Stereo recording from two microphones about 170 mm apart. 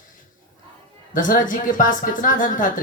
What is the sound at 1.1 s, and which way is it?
Speech, 50° left (ahead or behind).